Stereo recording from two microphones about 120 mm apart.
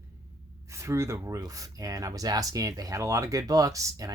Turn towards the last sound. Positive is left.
turn(degrees=-30)  # may be behind; listen again after turning